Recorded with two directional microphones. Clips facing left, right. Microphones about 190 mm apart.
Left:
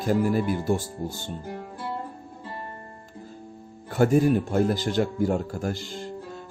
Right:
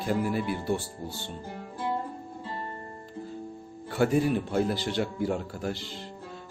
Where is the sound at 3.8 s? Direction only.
45° left (ahead or behind).